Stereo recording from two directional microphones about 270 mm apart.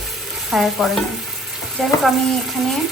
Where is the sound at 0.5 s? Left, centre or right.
Centre.